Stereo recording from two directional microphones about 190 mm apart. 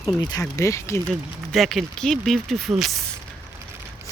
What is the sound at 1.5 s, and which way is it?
Speech, centre (ahead or behind).